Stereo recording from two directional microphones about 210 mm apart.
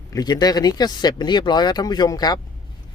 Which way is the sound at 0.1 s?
20° left (ahead or behind).